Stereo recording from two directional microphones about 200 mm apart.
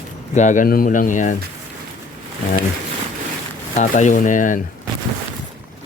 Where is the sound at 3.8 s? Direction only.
35° left (ahead or behind).